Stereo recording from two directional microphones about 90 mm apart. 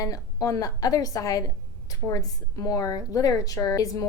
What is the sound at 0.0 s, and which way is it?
A woman's voice, 40° left (ahead or behind).